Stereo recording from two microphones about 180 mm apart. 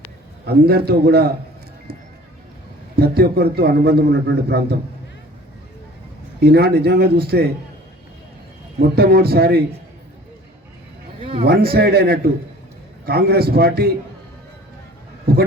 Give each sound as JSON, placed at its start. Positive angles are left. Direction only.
{"t": 0.4, "sound": "a man's voice", "side_deg": -60}
{"t": 2.9, "sound": "a man's voice", "side_deg": -60}
{"t": 6.4, "sound": "a man's voice", "side_deg": -60}
{"t": 9.0, "sound": "a man's voice", "side_deg": -60}
{"t": 11.2, "sound": "a sound", "side_deg": -30}
{"t": 11.4, "sound": "a man's voice", "side_deg": -60}